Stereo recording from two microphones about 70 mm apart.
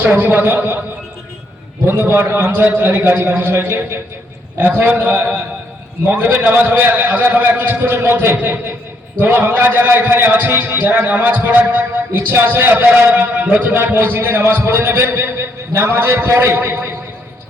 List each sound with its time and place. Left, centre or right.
0.0 s a man's voice: right
2.0 s a man's voice: right
6.4 s a man's voice: right
13.7 s a man's voice: right